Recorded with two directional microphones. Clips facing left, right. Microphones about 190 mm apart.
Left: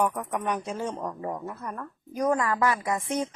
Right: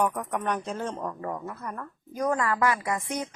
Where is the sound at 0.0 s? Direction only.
5° left (ahead or behind).